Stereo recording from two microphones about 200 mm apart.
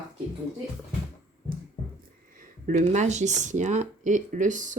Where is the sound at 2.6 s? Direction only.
40° right (ahead or behind).